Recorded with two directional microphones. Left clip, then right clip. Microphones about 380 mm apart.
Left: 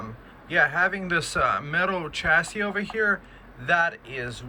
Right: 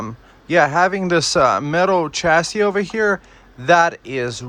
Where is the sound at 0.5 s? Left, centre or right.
Centre.